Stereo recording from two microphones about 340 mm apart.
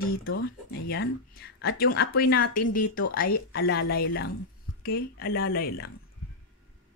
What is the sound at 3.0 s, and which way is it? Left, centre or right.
Speech, left.